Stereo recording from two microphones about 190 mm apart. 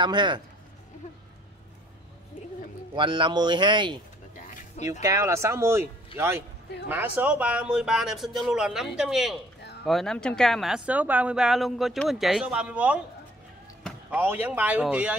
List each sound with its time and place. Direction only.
0.0 s speech: 25° right (ahead or behind)
2.9 s speech: 25° right (ahead or behind)
5.0 s speech: 15° right (ahead or behind)
14.1 s speech: 10° right (ahead or behind)